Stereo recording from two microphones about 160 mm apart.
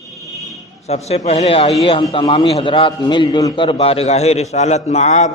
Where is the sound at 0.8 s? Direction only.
40° left (ahead or behind).